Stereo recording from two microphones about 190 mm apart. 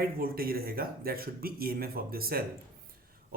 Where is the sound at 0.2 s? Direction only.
50° right (ahead or behind).